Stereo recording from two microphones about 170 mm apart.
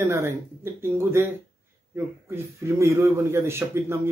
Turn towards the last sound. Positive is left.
turn(degrees=-15)  # may be behind; listen again after turning